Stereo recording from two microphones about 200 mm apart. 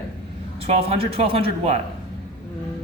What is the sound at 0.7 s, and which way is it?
A man's voice, 30° right (ahead or behind).